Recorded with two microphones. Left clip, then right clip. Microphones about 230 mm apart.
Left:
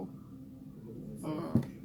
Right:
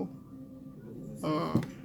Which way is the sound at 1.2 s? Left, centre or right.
Right.